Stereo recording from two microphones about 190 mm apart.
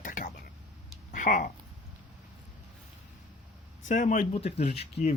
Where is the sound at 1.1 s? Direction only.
45° left (ahead or behind).